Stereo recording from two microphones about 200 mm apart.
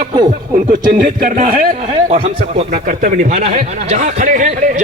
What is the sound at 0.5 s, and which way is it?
Speech, 45° right (ahead or behind).